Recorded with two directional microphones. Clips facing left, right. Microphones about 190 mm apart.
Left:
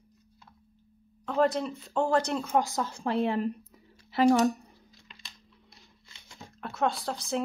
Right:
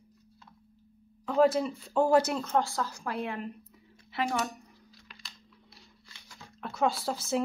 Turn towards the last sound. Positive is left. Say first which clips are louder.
# right 1 dB
turn(degrees=-5)  # may be behind; listen again after turning